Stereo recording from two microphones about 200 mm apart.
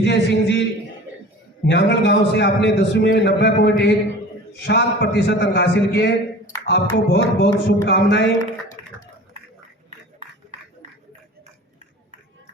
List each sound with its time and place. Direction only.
0.0 s a man's voice: 60° left (ahead or behind)
1.6 s a man's voice: 60° left (ahead or behind)
8.8 s a sound: 30° right (ahead or behind)